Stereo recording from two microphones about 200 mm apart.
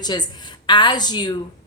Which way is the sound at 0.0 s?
20° left (ahead or behind).